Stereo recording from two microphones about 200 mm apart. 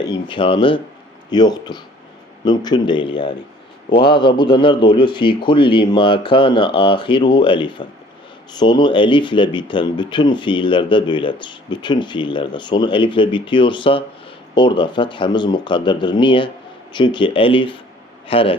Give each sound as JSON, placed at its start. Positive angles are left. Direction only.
{"t": 0.1, "sound": "speech", "side_deg": 25}